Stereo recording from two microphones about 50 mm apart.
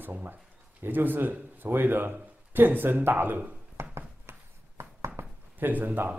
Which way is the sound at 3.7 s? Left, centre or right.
Right.